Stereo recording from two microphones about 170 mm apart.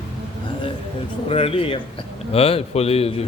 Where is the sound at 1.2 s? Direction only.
35° left (ahead or behind).